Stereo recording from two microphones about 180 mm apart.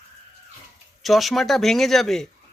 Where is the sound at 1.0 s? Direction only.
Centre (ahead or behind).